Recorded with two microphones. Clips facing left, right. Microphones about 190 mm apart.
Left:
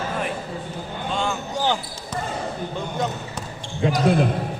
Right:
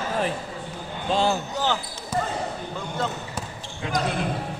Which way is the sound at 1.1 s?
35° right (ahead or behind).